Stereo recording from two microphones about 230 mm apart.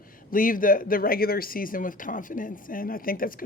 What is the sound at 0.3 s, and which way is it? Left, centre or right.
Speech, left.